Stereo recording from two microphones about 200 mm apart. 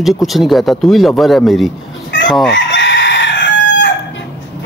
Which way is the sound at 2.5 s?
60° left (ahead or behind).